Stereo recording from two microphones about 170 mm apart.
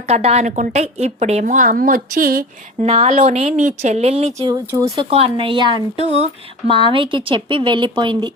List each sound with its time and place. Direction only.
0.1 s a woman's voice: 40° right (ahead or behind); by 2.4 s 55° right (ahead or behind)
2.8 s speech: 40° right (ahead or behind)